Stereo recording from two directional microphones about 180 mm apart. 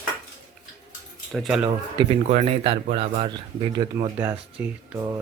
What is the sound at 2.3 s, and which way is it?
Speech, 35° right (ahead or behind).